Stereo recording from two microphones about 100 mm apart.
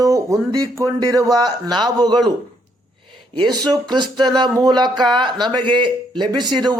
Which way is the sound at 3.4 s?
45° right (ahead or behind).